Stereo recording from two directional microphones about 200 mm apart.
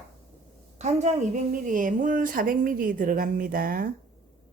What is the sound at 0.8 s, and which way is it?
A woman's voice, 35° right (ahead or behind).